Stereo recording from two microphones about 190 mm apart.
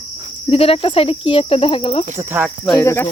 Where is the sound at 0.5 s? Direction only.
30° left (ahead or behind).